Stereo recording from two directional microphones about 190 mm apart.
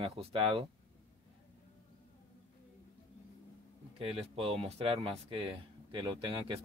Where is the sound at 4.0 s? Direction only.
30° right (ahead or behind).